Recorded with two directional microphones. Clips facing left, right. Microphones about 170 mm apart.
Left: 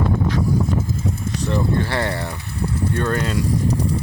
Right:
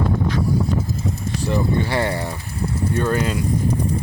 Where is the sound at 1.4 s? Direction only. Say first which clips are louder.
Right 1 dB; 5° right (ahead or behind).